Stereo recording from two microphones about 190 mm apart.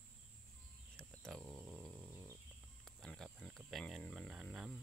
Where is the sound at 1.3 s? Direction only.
Centre (ahead or behind).